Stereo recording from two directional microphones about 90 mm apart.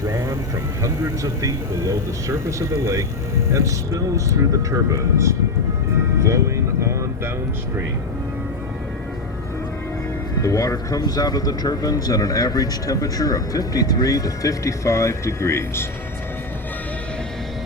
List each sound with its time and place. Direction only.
0.0 s vehicle: 30° right (ahead or behind)
0.8 s speech: 35° right (ahead or behind)
10.4 s a man's voice: 35° left (ahead or behind)